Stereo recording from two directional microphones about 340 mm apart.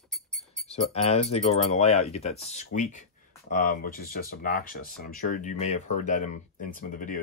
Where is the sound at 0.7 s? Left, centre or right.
Centre.